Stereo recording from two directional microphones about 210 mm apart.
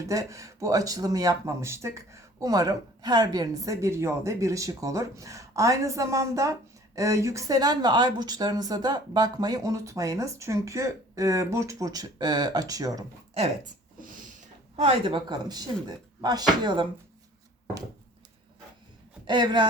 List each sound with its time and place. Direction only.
0.1 s speech: 15° right (ahead or behind)
14.8 s speech: 25° right (ahead or behind)
19.3 s speech: 20° right (ahead or behind)